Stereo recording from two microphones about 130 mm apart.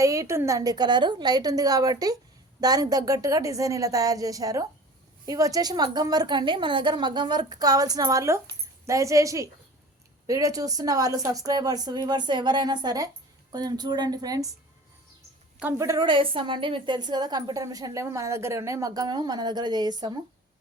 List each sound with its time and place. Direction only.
0.0 s a woman's voice: 25° right (ahead or behind)
15.8 s a woman's voice: 25° right (ahead or behind)
16.0 s a woman's voice: 40° right (ahead or behind)